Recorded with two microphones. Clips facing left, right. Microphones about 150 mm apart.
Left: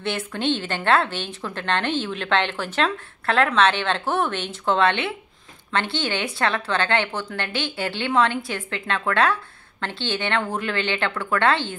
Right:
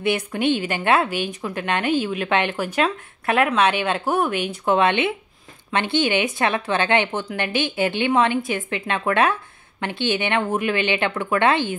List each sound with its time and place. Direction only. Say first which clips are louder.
0.1 s a woman's voice: right 3 dB; 15° right (ahead or behind)